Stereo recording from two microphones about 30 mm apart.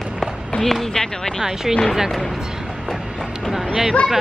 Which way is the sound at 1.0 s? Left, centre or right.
Left.